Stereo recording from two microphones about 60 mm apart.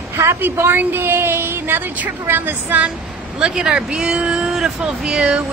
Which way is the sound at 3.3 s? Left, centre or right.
Centre.